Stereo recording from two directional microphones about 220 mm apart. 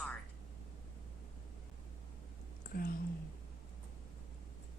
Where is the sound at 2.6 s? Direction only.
40° left (ahead or behind).